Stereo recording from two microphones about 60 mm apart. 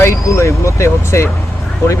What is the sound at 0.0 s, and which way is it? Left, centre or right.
Speech, left.